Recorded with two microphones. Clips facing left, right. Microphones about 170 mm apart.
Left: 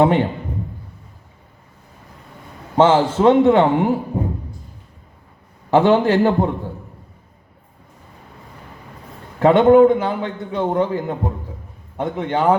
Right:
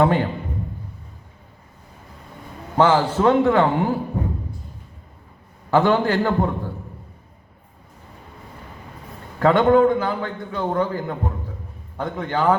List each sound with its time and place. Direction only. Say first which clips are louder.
0.0 s a man's voice: left 3 dB; 20° left (ahead or behind)
2.7 s a man's voice: left 3 dB; 20° left (ahead or behind)
5.7 s a man's voice: left 4 dB; 25° left (ahead or behind)
9.4 s a man's voice: left 4 dB; 25° left (ahead or behind)